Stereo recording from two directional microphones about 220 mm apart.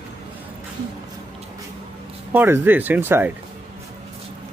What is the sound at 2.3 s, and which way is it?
Speech, 10° right (ahead or behind).